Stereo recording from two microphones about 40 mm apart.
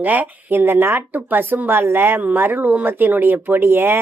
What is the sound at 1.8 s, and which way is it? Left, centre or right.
Speech, right.